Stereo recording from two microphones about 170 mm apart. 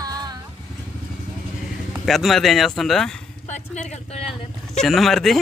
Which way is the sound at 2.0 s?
Centre (ahead or behind).